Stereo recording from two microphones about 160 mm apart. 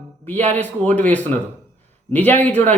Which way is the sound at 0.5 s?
10° left (ahead or behind).